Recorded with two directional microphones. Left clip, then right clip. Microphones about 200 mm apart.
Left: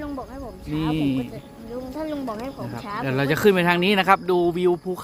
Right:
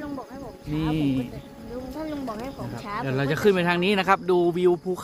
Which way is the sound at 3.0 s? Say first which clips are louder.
Left 3 dB; 35° left (ahead or behind).